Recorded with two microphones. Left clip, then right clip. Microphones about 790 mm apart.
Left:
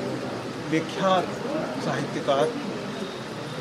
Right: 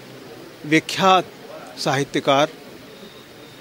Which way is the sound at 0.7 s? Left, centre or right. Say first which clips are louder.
Right 8 dB; right.